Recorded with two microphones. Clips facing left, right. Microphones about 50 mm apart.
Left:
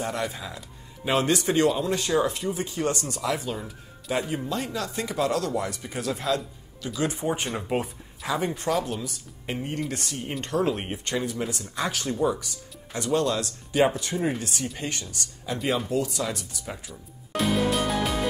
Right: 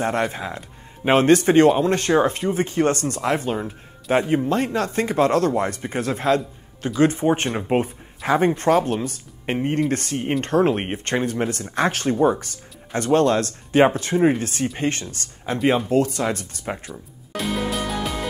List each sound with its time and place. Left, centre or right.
0.0 s speech: right
17.4 s music: centre